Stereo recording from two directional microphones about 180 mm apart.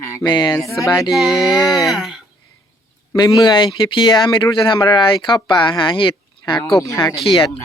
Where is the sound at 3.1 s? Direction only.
20° left (ahead or behind).